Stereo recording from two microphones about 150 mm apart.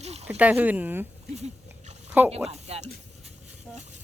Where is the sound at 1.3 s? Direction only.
50° right (ahead or behind).